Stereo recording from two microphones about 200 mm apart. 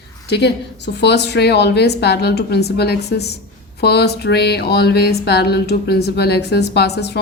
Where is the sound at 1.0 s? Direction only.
60° left (ahead or behind).